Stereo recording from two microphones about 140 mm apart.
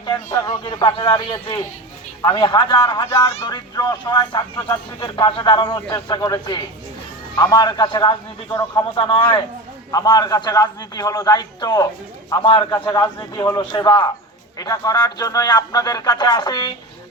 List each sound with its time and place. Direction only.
0.3 s speech: 30° left (ahead or behind)
12.9 s speech: 30° left (ahead or behind)